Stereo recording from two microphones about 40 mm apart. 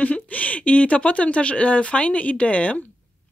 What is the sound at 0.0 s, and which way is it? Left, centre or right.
Speech, left.